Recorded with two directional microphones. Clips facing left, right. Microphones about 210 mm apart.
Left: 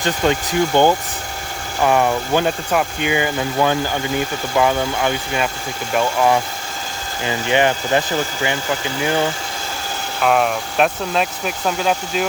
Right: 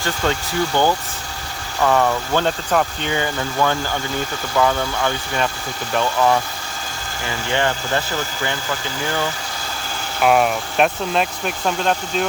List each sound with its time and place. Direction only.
0.0 s speech: 20° left (ahead or behind)
7.3 s speech: 15° left (ahead or behind)
10.2 s speech: centre (ahead or behind)